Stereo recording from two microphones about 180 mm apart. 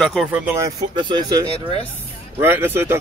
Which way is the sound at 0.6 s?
20° right (ahead or behind).